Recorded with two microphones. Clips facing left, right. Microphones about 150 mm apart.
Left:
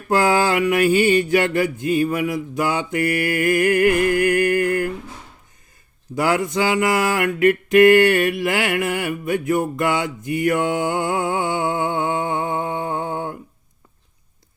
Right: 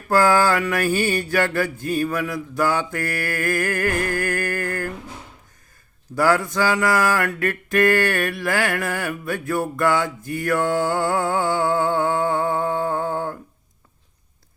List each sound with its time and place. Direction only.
0.1 s mantra: 20° left (ahead or behind)
6.1 s mantra: 20° left (ahead or behind)